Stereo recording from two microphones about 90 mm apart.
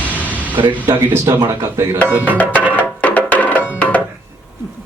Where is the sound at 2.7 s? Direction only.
15° left (ahead or behind).